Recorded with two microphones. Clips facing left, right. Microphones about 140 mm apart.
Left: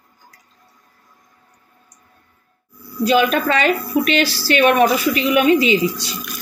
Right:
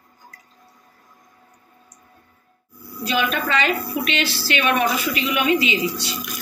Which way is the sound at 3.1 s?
40° left (ahead or behind).